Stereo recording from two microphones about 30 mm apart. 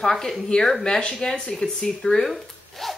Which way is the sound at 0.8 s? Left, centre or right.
Left.